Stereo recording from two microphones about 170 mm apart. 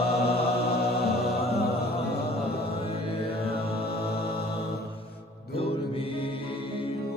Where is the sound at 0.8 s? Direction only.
70° left (ahead or behind).